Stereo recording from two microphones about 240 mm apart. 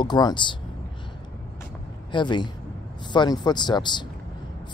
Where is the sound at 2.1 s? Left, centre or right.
Centre.